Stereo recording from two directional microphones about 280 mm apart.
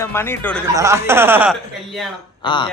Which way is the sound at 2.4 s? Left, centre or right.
Centre.